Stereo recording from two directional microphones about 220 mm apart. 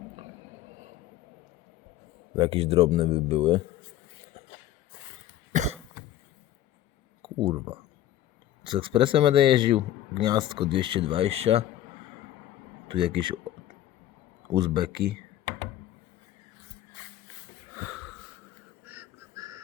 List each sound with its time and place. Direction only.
2.3 s a man's voice: 25° right (ahead or behind)
5.5 s cough: 35° right (ahead or behind)
7.2 s a sound: 20° right (ahead or behind)
8.6 s a man's voice: 20° right (ahead or behind)
12.9 s a man's voice: 20° right (ahead or behind)
14.5 s a man's voice: 20° right (ahead or behind)
17.7 s wheeze: 5° right (ahead or behind)
18.9 s a sound: 10° right (ahead or behind)